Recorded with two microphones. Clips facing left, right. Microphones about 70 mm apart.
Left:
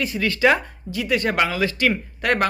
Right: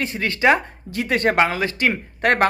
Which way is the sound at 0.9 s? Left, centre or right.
Right.